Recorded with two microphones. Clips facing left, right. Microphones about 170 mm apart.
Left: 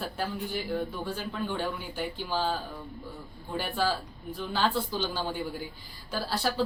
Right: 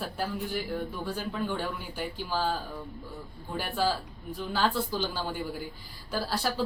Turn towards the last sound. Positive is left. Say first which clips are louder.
# even
turn(degrees=-10)  # may be behind; listen again after turning